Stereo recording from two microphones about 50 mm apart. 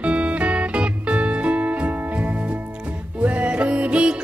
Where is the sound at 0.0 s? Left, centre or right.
Right.